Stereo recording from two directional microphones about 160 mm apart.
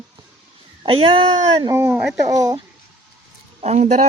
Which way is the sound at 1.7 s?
15° right (ahead or behind).